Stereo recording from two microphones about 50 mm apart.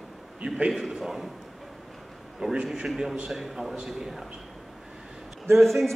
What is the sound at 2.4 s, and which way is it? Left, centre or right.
Speech, centre.